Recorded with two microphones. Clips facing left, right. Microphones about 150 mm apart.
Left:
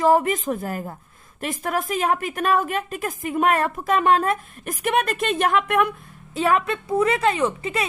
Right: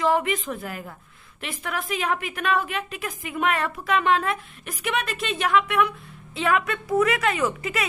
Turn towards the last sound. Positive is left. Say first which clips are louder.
# left 2 dB
turn(degrees=30)  # may be behind; listen again after turning